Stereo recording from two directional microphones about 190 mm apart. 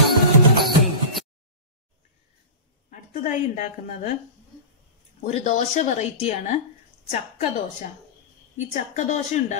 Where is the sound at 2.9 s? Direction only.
40° left (ahead or behind).